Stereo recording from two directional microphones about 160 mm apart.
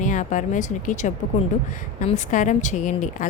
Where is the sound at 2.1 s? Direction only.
50° left (ahead or behind).